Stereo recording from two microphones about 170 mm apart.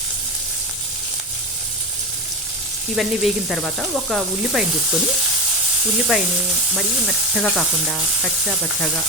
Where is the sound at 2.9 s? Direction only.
Centre (ahead or behind).